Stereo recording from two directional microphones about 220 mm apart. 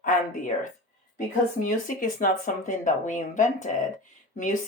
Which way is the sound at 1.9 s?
40° left (ahead or behind).